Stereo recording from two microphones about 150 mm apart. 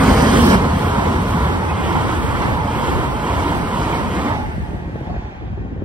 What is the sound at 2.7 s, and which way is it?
Vehicle, 10° right (ahead or behind).